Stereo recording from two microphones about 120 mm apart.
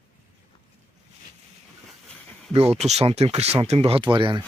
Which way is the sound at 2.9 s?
60° right (ahead or behind).